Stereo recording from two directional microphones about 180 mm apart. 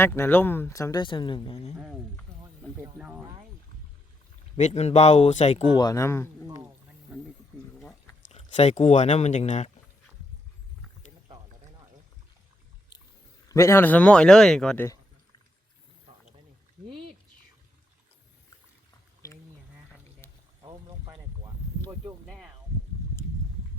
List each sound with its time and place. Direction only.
0.0 s speech: 10° left (ahead or behind); by 1.7 s 30° left (ahead or behind)
3.0 s speech: 10° right (ahead or behind)
4.5 s speech: 40° left (ahead or behind)
5.7 s speech: 20° left (ahead or behind)
8.3 s speech: 35° left (ahead or behind)
13.5 s a man's voice: 15° left (ahead or behind)
19.2 s a sound: 15° left (ahead or behind)